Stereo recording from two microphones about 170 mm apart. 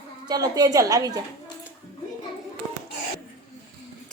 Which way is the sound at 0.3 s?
20° right (ahead or behind).